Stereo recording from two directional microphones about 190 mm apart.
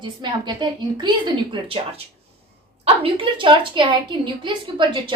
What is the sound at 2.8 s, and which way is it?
A woman's voice, 30° right (ahead or behind).